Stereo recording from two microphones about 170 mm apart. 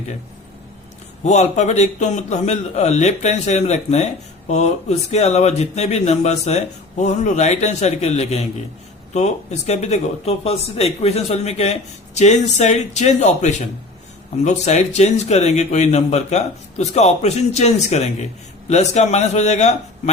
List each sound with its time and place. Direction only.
1.2 s a man's voice: 45° left (ahead or behind)